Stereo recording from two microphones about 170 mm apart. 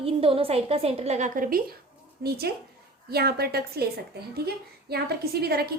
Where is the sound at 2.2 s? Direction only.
65° right (ahead or behind).